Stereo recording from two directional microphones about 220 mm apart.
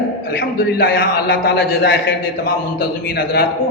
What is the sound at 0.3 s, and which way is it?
A man's voice, 40° left (ahead or behind).